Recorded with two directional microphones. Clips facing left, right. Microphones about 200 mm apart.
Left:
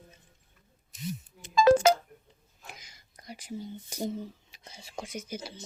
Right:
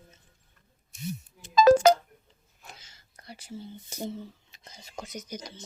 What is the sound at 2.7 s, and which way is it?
Whispering, 15° left (ahead or behind).